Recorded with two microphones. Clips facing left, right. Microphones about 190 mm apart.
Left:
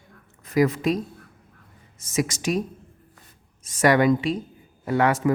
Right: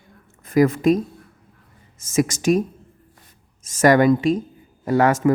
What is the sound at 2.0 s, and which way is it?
Speech, 45° right (ahead or behind).